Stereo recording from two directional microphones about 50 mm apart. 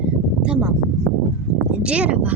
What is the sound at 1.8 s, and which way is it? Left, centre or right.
Speech, right.